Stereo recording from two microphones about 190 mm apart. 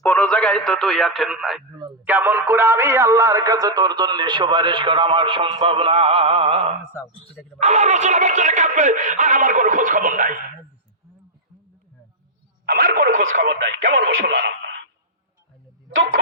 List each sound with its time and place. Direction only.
0.0 s speech: 5° left (ahead or behind); by 10.4 s 45° right (ahead or behind)
12.6 s speech: 50° right (ahead or behind)